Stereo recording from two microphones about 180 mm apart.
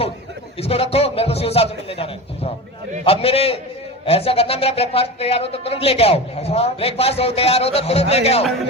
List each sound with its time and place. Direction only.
0.6 s speech: 35° left (ahead or behind)